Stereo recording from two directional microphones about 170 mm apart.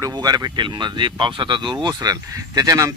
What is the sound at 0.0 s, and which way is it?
Speech, 25° right (ahead or behind).